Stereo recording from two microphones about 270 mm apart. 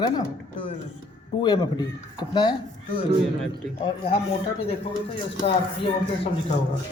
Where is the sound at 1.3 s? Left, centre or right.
Centre.